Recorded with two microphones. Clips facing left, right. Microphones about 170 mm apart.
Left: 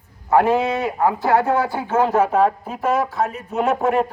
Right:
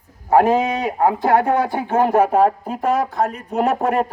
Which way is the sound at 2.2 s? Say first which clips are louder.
Right 2 dB; 45° right (ahead or behind).